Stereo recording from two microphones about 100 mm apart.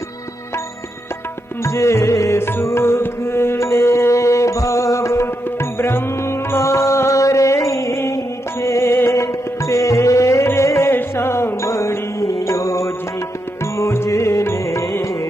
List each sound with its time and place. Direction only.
1.6 s music: 30° left (ahead or behind)